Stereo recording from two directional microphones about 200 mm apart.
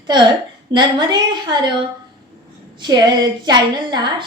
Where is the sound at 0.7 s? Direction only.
20° right (ahead or behind).